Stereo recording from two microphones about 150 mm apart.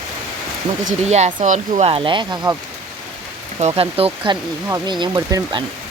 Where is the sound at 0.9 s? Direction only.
50° right (ahead or behind); by 2.4 s 35° right (ahead or behind).